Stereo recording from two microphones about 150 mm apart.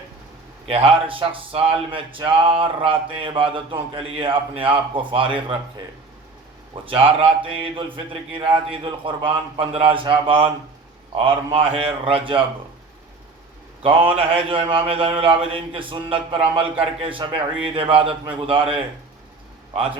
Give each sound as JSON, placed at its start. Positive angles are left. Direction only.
{"t": 0.7, "sound": "speech", "side_deg": -40}
{"t": 6.8, "sound": "speech", "side_deg": -35}
{"t": 14.3, "sound": "speech", "side_deg": -35}